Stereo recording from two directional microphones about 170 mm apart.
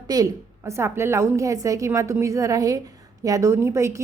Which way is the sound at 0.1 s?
20° right (ahead or behind).